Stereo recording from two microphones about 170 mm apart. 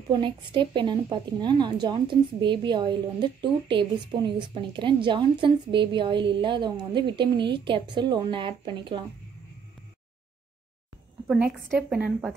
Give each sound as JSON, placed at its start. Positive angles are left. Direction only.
{"t": 0.1, "sound": "a woman's voice", "side_deg": -30}
{"t": 11.2, "sound": "a woman's voice", "side_deg": -5}